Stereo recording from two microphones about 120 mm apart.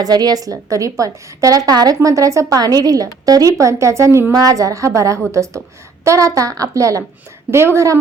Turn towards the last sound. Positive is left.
turn(degrees=-25)  # may be behind; listen again after turning